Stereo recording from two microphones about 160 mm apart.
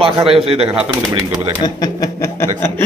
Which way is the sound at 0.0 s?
35° right (ahead or behind).